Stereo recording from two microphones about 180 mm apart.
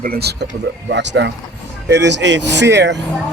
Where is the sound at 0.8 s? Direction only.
75° right (ahead or behind).